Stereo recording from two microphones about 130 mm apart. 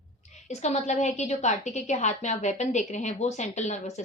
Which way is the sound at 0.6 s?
65° left (ahead or behind).